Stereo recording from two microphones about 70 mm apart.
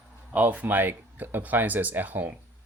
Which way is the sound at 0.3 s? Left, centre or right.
Right.